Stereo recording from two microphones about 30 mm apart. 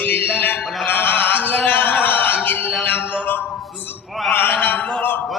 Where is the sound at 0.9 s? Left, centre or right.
Left.